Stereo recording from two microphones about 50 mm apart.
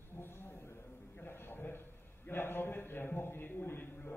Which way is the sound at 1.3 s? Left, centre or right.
Left.